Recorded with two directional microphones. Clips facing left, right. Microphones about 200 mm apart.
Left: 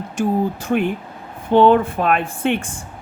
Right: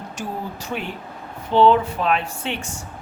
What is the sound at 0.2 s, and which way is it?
Speech, 55° left (ahead or behind).